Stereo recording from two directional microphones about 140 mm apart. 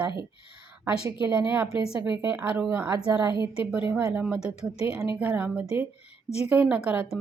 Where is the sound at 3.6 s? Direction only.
10° right (ahead or behind).